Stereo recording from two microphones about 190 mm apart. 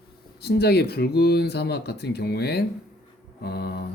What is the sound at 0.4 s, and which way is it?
Speech, 60° left (ahead or behind).